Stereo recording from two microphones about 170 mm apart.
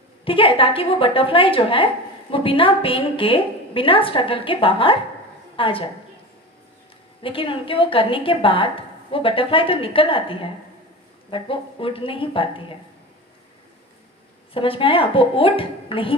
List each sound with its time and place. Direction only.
0.3 s a woman's voice: 30° left (ahead or behind)
7.2 s a woman's voice: 30° left (ahead or behind)
14.5 s a woman's voice: 30° left (ahead or behind)